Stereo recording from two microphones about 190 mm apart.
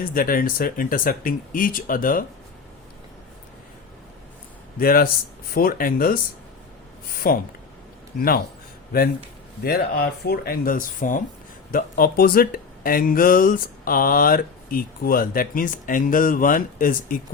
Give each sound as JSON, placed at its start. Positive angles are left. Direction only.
{"t": 0.1, "sound": "speech", "side_deg": 50}
{"t": 4.8, "sound": "speech", "side_deg": 50}
{"t": 9.6, "sound": "speech", "side_deg": 50}